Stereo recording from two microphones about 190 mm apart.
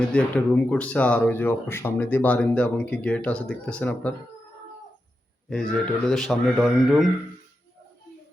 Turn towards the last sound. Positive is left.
turn(degrees=0)  # may be behind; listen again after turning